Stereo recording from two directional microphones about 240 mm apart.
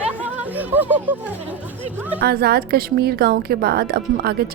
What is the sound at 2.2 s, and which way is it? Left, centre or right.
A woman's voice, right.